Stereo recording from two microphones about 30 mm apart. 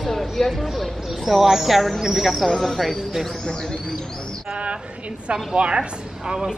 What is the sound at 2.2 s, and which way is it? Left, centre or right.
Speech, centre.